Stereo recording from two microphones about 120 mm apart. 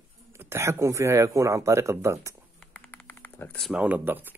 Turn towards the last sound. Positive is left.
turn(degrees=-15)  # may be behind; listen again after turning